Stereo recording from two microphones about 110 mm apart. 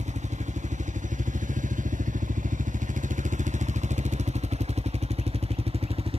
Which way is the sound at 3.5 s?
90° right.